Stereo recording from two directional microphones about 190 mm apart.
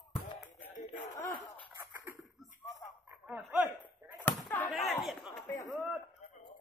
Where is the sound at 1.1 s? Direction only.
20° left (ahead or behind).